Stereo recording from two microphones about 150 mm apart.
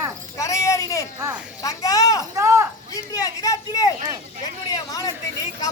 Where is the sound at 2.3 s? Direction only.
20° right (ahead or behind).